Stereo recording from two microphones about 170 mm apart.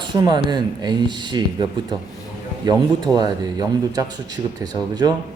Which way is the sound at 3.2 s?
20° right (ahead or behind).